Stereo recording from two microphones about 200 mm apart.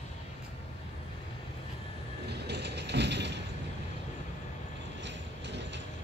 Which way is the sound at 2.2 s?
55° right (ahead or behind).